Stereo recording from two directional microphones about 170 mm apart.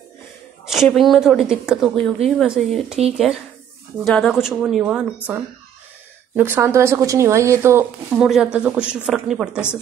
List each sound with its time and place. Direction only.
0.7 s speech: centre (ahead or behind)
4.0 s a woman's voice: 5° left (ahead or behind); by 8.2 s 15° right (ahead or behind)
8.2 s speech: 5° right (ahead or behind)